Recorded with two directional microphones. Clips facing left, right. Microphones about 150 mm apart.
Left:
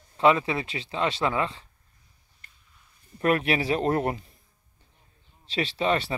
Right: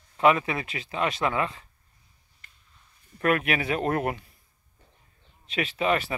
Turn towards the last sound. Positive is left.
turn(degrees=30)  # may be behind; listen again after turning